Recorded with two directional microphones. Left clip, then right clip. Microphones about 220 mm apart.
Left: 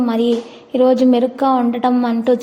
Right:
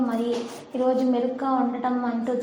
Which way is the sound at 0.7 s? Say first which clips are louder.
Left 10 dB; 45° left (ahead or behind).